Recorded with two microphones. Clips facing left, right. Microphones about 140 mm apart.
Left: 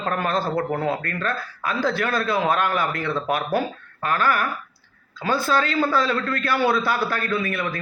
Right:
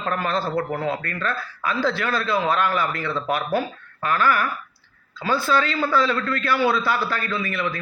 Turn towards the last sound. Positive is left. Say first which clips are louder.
# left 1 dB
turn(degrees=50)  # may be behind; listen again after turning